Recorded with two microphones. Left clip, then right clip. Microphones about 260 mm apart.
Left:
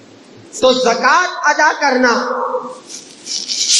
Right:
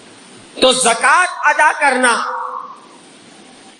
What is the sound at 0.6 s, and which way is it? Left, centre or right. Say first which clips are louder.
A man's voice: even; right.